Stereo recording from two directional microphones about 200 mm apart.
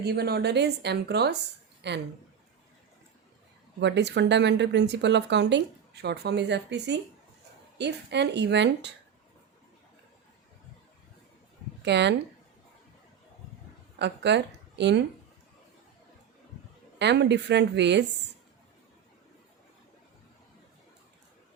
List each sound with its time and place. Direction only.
0.0 s speech: 55° right (ahead or behind)
3.8 s speech: 60° right (ahead or behind)
11.8 s speech: 60° right (ahead or behind)
14.0 s a woman's voice: 60° right (ahead or behind)
17.0 s speech: 60° right (ahead or behind)